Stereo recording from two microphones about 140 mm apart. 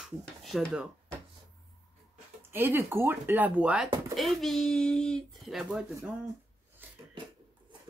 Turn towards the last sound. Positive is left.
turn(degrees=-15)  # may be behind; listen again after turning